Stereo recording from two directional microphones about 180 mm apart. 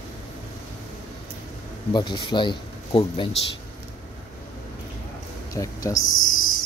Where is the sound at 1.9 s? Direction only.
25° left (ahead or behind).